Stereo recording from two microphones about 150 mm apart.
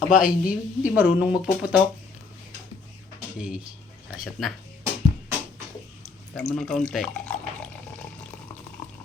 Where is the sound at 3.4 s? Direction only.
5° right (ahead or behind).